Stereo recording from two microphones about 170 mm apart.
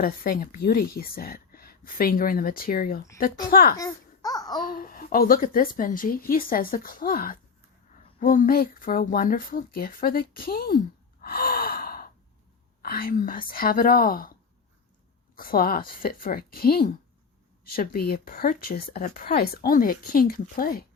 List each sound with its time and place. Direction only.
0.0 s a woman's voice: 60° left (ahead or behind)
3.8 s babbling: 20° left (ahead or behind)
4.6 s a woman's voice: 60° left (ahead or behind)
11.2 s gasp: 60° left (ahead or behind)
12.8 s a woman's voice: 60° left (ahead or behind)
15.4 s a woman's voice: 60° left (ahead or behind)